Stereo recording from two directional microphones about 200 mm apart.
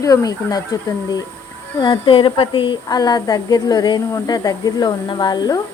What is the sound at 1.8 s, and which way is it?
Speech, 25° left (ahead or behind).